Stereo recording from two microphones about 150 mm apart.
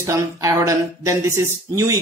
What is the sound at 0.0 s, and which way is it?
Speech, 20° right (ahead or behind).